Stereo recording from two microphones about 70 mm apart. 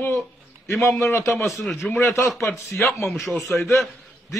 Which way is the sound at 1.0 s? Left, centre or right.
Left.